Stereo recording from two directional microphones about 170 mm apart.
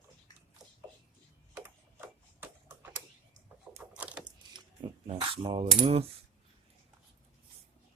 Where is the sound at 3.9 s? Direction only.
5° right (ahead or behind).